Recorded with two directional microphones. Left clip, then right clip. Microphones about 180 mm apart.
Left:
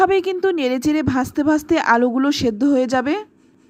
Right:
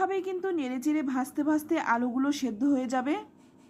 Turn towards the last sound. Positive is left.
turn(degrees=30)  # may be behind; listen again after turning